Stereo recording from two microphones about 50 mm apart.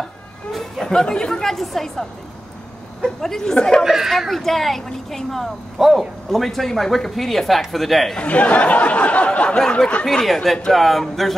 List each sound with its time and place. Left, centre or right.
0.5 s speech: centre
3.8 s speech: centre
4.3 s speech: centre
8.2 s speech: left
10.0 s speech: centre